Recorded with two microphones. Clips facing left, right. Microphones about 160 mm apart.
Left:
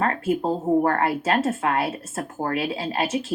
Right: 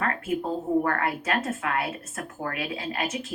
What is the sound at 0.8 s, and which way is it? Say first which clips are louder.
A woman's voice: left 5 dB; 30° left (ahead or behind).